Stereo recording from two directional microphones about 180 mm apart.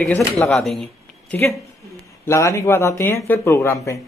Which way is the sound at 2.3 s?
15° left (ahead or behind).